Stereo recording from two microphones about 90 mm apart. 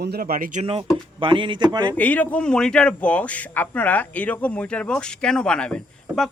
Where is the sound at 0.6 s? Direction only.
90° right.